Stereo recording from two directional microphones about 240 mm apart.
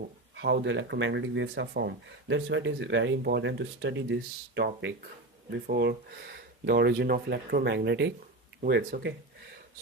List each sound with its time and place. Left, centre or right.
0.3 s speech: right